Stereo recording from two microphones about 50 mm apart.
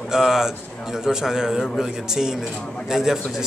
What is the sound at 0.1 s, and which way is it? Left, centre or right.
A man's voice, centre.